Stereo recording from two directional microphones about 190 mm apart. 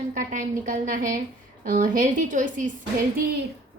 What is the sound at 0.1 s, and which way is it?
A woman's voice, 45° right (ahead or behind).